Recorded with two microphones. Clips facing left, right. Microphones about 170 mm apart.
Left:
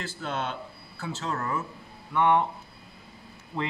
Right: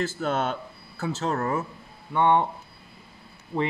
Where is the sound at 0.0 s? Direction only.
45° right (ahead or behind); by 2.4 s 30° right (ahead or behind).